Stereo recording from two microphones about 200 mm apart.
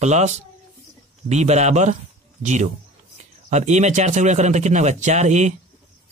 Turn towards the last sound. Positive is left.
turn(degrees=-35)  # may be behind; listen again after turning